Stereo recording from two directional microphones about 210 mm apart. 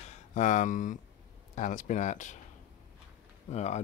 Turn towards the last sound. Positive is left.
turn(degrees=35)  # may be behind; listen again after turning